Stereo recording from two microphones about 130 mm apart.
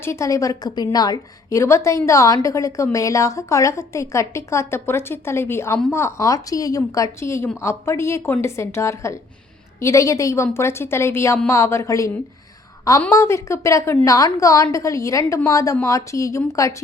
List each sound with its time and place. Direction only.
0.0 s a woman's voice: 20° left (ahead or behind)
13.1 s a woman's voice: 20° left (ahead or behind)